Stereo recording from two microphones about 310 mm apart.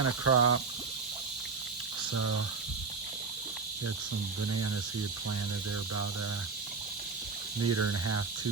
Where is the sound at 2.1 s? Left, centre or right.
Right.